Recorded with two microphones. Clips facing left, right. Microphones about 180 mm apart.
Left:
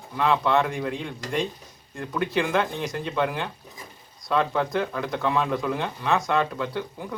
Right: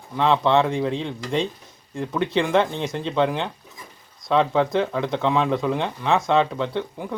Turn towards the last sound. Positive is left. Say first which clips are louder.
# right 4 dB
turn(degrees=-20)  # may be behind; listen again after turning